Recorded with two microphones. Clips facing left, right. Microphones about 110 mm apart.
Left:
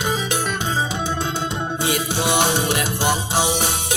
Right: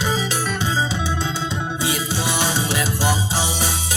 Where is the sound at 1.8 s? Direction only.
60° left (ahead or behind).